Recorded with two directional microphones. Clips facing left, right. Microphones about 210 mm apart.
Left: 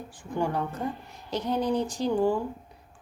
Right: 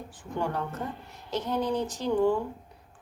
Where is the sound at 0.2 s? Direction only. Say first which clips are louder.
Left 3 dB; 10° left (ahead or behind).